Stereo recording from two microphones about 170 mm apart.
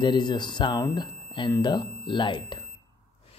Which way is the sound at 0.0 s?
25° left (ahead or behind).